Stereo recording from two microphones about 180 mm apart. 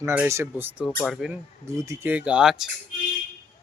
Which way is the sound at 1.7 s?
15° right (ahead or behind).